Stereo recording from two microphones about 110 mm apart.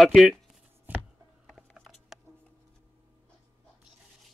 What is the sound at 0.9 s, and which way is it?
Chopping, 15° right (ahead or behind).